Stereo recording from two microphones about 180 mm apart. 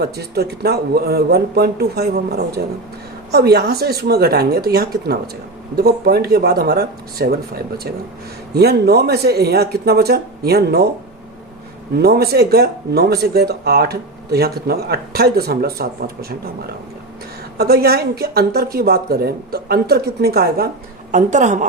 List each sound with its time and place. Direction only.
0.0 s speech: 60° right (ahead or behind)
11.9 s speech: 60° right (ahead or behind)
17.6 s speech: 60° right (ahead or behind)
21.1 s a woman's voice: 45° right (ahead or behind)